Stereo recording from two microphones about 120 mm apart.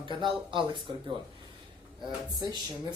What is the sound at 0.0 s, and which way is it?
Speech, 40° right (ahead or behind).